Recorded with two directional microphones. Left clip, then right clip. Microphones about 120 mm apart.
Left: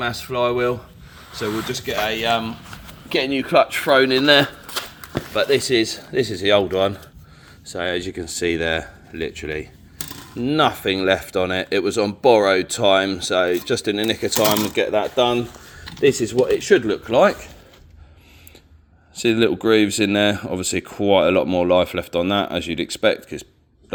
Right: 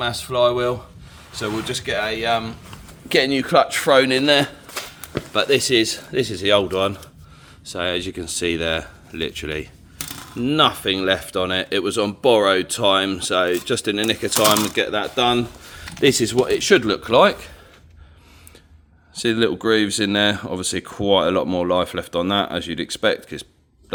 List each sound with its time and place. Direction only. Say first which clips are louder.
0.0 s speech: right 3 dB; 10° right (ahead or behind)
2.0 s speech: left 1 dB; 25° left (ahead or behind)
3.3 s speech: even; 40° right (ahead or behind)
4.3 s speech: left 2 dB; 5° left (ahead or behind)
5.5 s speech: right 2 dB; 30° right (ahead or behind)
6.1 s speech: left 1 dB; 15° right (ahead or behind)
7.6 s speech: even; 25° right (ahead or behind)
9.1 s speech: right 1 dB; 35° right (ahead or behind)
10.6 s speech: right 1 dB; centre (ahead or behind); by 14.5 s 20° right (ahead or behind)
14.5 s speech: even; 30° right (ahead or behind)
15.3 s a sound: right 2 dB; 50° right (ahead or behind)
16.0 s speech: even; 65° right (ahead or behind); by 17.2 s 45° right (ahead or behind)
19.1 s speech: left 2 dB; 10° right (ahead or behind)